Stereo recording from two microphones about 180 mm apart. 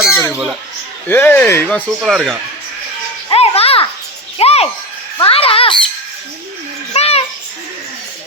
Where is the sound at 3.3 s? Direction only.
35° left (ahead or behind).